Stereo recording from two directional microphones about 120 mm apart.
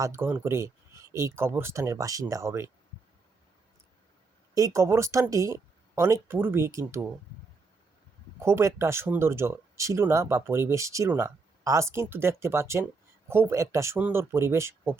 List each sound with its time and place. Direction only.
0.0 s speech: 20° right (ahead or behind)
4.5 s speech: 25° right (ahead or behind)
8.4 s speech: 20° right (ahead or behind)